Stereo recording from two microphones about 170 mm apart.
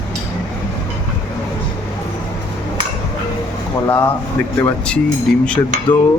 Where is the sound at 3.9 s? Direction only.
10° left (ahead or behind).